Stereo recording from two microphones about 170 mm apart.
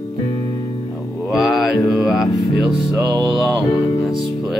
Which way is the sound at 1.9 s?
Centre (ahead or behind).